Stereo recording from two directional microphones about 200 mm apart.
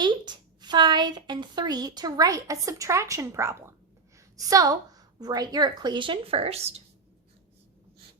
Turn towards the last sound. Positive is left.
turn(degrees=-30)  # may be behind; listen again after turning